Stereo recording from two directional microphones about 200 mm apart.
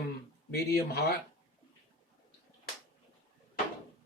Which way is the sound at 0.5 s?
55° left (ahead or behind).